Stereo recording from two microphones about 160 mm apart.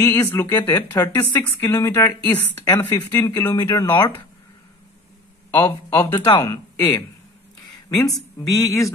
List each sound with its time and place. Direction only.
0.0 s speech: 15° left (ahead or behind)
3.2 s speech: 25° left (ahead or behind)
5.5 s speech: 10° left (ahead or behind)
8.5 s speech: 20° left (ahead or behind)